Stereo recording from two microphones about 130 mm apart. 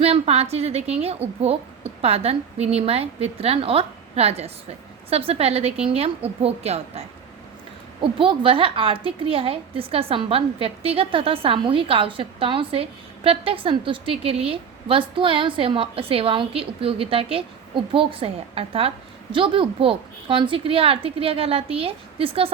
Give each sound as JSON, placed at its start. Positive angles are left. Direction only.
{"t": 0.0, "sound": "a woman's voice", "side_deg": -50}
{"t": 8.0, "sound": "a woman's voice", "side_deg": -40}